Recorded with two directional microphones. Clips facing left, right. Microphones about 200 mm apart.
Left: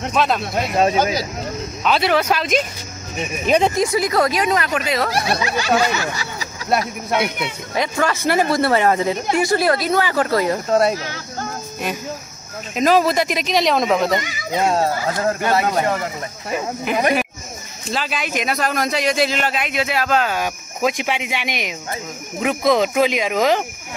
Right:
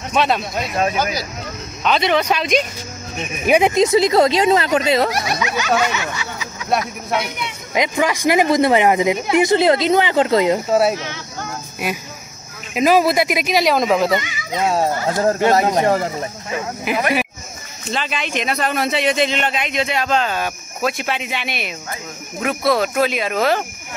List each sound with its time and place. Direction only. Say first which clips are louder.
0.1 s a man's voice: right 2 dB; centre (ahead or behind)
0.7 s speech: left 3 dB; 25° left (ahead or behind)
1.8 s a man's voice: right 1 dB; 5° left (ahead or behind)
3.4 s speech: right 3 dB; 10° right (ahead or behind)
5.1 s speech: left 1 dB; 30° left (ahead or behind)
7.7 s speech: right 3 dB; 15° right (ahead or behind)
10.7 s a man's voice: right 1 dB; 5° right (ahead or behind)
14.8 s speech: right 1 dB; 15° right (ahead or behind)
15.8 s speech: right 4 dB; 30° right (ahead or behind)
16.9 s a man's voice: left 1 dB; 5° right (ahead or behind); by 23.6 s 15° left (ahead or behind)